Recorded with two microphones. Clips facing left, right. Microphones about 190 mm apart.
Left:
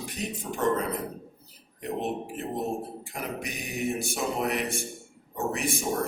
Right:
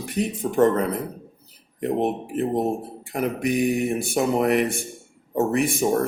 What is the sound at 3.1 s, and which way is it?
Speech, 60° right (ahead or behind).